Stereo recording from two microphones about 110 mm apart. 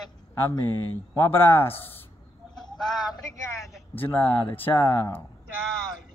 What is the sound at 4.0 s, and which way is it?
Speech, 15° left (ahead or behind).